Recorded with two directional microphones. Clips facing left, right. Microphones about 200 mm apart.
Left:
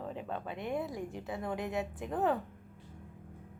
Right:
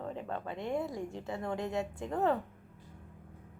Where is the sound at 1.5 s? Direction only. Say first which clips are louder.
Right 1 dB; 15° left (ahead or behind).